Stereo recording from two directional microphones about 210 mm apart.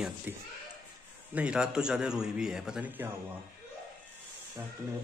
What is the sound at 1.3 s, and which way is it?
A man's voice, 5° right (ahead or behind).